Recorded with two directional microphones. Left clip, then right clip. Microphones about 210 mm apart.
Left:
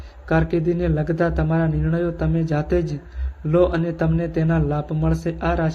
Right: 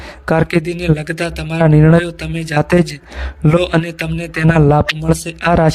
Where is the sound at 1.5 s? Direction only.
50° right (ahead or behind).